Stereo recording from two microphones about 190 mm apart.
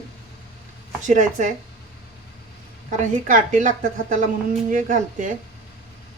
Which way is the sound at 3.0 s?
40° right (ahead or behind).